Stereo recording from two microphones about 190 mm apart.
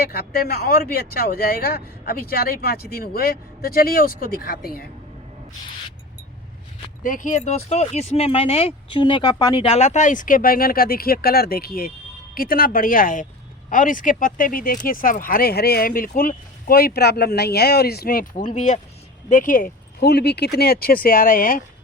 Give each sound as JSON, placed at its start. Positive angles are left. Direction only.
{"t": 0.1, "sound": "speech", "side_deg": 50}
{"t": 7.0, "sound": "speech", "side_deg": 45}